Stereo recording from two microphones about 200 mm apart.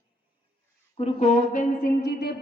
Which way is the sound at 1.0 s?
30° left (ahead or behind).